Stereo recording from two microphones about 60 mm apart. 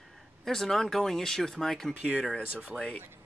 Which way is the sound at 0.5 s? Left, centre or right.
Centre.